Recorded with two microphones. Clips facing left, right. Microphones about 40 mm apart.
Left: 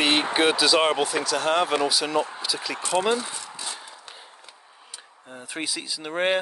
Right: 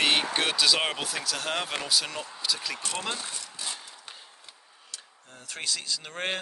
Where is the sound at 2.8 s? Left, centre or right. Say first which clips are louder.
Left 10 dB; left.